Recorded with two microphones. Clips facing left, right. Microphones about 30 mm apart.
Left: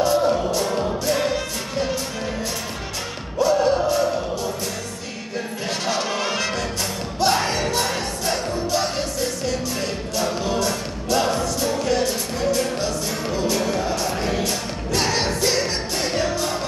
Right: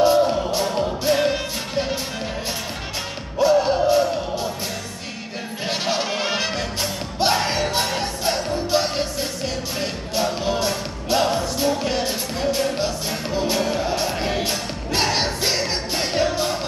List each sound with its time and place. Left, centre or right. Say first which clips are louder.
0.0 s music: right 2 dB; right
3.3 s music: right 1 dB; right
5.7 s music: right 1 dB; right